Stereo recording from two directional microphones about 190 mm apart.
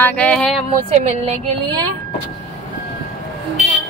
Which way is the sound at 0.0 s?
5° left (ahead or behind).